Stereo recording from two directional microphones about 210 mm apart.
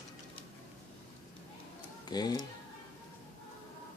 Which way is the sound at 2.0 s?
20° left (ahead or behind).